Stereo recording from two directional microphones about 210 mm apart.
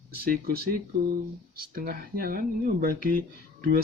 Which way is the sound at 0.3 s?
45° right (ahead or behind).